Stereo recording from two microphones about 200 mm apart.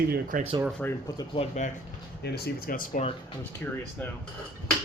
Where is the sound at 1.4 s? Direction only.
25° left (ahead or behind).